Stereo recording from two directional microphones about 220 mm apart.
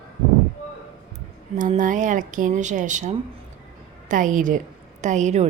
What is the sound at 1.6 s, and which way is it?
Speech, 35° right (ahead or behind).